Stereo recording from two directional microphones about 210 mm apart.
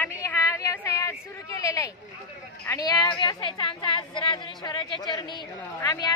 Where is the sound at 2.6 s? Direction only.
15° left (ahead or behind).